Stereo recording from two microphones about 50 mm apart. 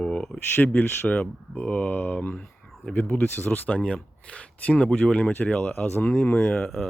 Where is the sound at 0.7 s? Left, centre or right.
Left.